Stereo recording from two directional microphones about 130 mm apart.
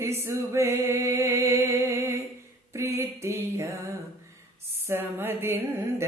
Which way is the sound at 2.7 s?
20° right (ahead or behind).